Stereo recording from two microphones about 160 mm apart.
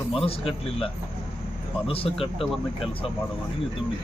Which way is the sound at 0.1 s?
35° left (ahead or behind).